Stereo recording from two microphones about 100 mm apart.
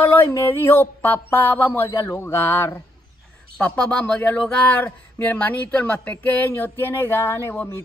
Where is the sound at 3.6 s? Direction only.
10° left (ahead or behind); by 7.7 s 25° left (ahead or behind).